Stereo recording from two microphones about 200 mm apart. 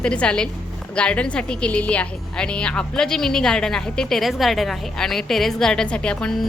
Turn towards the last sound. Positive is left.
turn(degrees=5)  # may be behind; listen again after turning